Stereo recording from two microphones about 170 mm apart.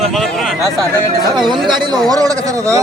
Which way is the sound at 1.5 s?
25° right (ahead or behind).